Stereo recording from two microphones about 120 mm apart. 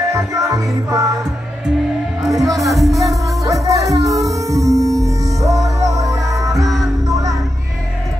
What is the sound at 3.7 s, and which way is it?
Music, 30° right (ahead or behind).